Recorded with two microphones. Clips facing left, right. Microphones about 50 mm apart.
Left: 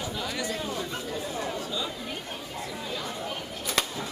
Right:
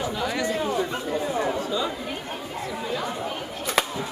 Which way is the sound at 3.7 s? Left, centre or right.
Centre.